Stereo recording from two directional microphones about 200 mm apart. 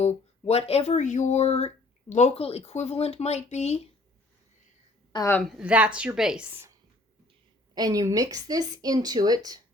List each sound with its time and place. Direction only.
0.0 s speech: 30° left (ahead or behind)
5.1 s a woman's voice: 15° left (ahead or behind)
5.5 s speech: 5° right (ahead or behind)
7.8 s speech: 20° right (ahead or behind)